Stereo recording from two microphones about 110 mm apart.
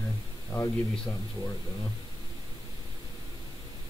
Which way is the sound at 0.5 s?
35° left (ahead or behind).